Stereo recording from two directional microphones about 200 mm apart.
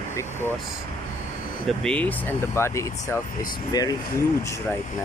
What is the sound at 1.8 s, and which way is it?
Speech, 5° left (ahead or behind).